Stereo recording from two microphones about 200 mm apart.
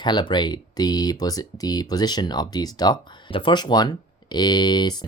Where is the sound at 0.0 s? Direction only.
20° left (ahead or behind).